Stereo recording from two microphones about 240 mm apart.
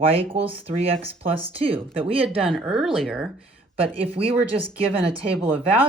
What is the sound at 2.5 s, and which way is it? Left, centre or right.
Speech, centre.